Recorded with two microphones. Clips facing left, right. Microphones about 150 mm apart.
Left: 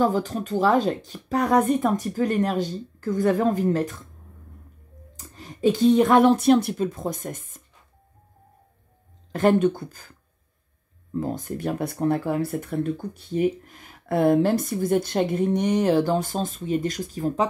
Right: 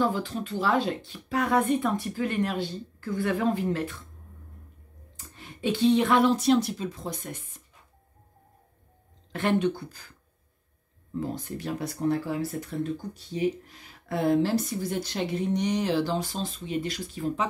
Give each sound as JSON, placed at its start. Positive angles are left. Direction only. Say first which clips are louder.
{"t": 0.0, "sound": "speech", "louder": "left 5 dB", "side_deg": 45}
{"t": 5.1, "sound": "speech", "louder": "left 4 dB", "side_deg": 40}
{"t": 9.3, "sound": "speech", "louder": "left 6 dB", "side_deg": 45}
{"t": 11.1, "sound": "speech", "louder": "left 4 dB", "side_deg": 45}